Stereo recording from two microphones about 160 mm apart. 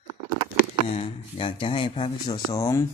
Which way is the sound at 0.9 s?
40° left (ahead or behind).